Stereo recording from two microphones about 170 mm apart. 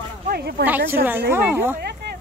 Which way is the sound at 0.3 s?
70° right (ahead or behind).